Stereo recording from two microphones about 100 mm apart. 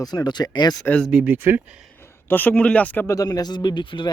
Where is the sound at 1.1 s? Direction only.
15° right (ahead or behind).